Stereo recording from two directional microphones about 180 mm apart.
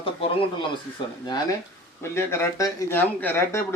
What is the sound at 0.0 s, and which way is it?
Speech, 30° left (ahead or behind).